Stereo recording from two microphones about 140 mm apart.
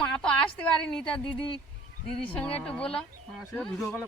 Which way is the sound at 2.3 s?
5° left (ahead or behind).